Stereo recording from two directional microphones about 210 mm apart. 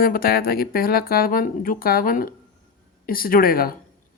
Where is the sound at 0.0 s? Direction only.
45° left (ahead or behind).